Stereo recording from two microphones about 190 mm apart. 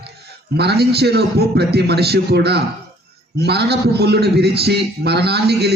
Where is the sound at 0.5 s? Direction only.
60° right (ahead or behind).